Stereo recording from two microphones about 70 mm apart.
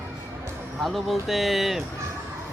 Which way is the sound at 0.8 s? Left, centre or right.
Centre.